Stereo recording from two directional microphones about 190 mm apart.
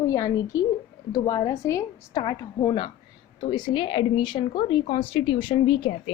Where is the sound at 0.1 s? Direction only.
20° left (ahead or behind).